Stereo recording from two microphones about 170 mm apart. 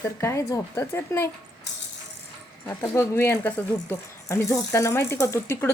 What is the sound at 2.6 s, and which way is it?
Speech, 15° left (ahead or behind).